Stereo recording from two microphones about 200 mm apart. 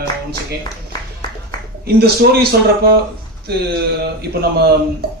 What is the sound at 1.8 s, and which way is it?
A man's voice, 50° right (ahead or behind).